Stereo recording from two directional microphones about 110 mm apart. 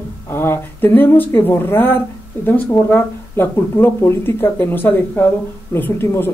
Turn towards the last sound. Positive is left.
turn(degrees=20)  # may be behind; listen again after turning